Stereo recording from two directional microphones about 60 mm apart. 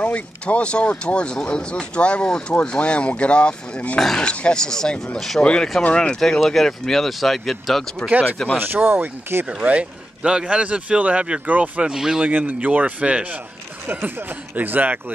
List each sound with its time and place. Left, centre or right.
0.0 s speech: left
4.0 s speech: centre
4.3 s speech: centre
5.4 s speech: centre
8.0 s speech: left
8.5 s speech: right
9.5 s speech: right
11.9 s a man's voice: centre
12.3 s speech: right
13.8 s speech: right